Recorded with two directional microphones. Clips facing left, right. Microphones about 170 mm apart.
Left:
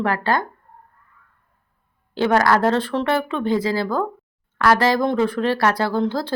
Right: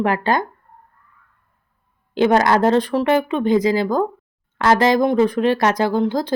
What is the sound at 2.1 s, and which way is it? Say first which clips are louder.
A woman's voice: right 2 dB; 20° right (ahead or behind).